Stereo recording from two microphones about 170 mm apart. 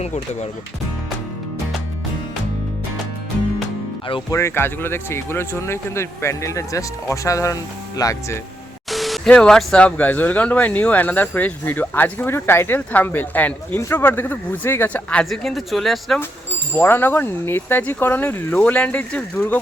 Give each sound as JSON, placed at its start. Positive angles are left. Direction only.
{"t": 0.0, "sound": "speech", "side_deg": 40}
{"t": 4.3, "sound": "speech", "side_deg": 15}
{"t": 8.9, "sound": "speech", "side_deg": 0}
{"t": 16.7, "sound": "speech", "side_deg": 10}